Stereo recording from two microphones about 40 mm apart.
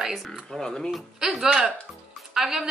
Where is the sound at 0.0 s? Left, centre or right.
Centre.